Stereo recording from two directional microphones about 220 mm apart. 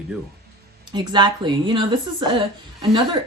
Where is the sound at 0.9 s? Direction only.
20° right (ahead or behind).